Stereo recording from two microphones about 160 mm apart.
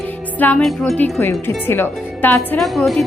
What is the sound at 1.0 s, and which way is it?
Speech, 15° left (ahead or behind).